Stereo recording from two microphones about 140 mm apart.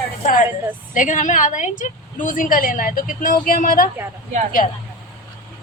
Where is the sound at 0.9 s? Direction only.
65° left (ahead or behind); by 3.8 s 80° left.